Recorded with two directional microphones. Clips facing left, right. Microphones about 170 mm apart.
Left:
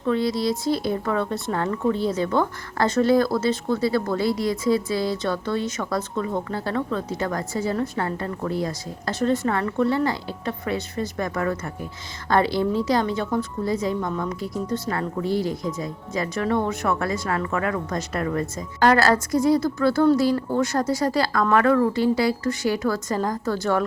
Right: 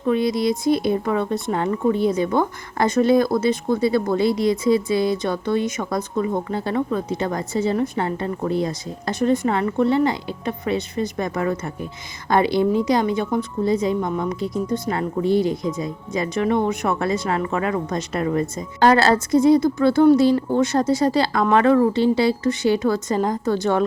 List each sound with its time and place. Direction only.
0.0 s speech: 20° right (ahead or behind)